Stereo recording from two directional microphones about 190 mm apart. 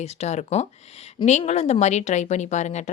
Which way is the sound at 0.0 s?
35° left (ahead or behind).